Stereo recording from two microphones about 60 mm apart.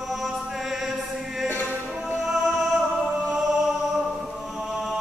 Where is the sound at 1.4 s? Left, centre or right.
Left.